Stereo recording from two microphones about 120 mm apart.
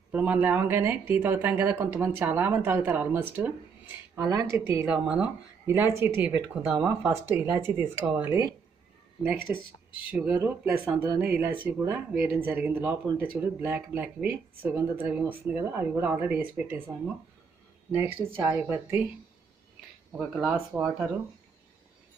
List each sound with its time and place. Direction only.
0.1 s speech: 15° right (ahead or behind)
4.3 s speech: 30° right (ahead or behind)
4.8 s speech: 10° right (ahead or behind)
5.7 s speech: 20° right (ahead or behind)
6.5 s speech: 10° right (ahead or behind)
17.9 s speech: 15° right (ahead or behind)
20.1 s speech: 5° right (ahead or behind)